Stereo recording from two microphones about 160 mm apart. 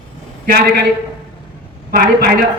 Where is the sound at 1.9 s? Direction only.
70° right (ahead or behind).